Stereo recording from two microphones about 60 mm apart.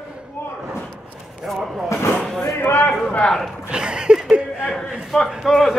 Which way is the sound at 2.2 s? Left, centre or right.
Centre.